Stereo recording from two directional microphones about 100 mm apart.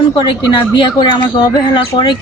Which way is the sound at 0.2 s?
50° left (ahead or behind).